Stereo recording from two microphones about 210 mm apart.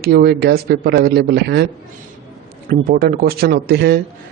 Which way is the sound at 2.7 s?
45° right (ahead or behind).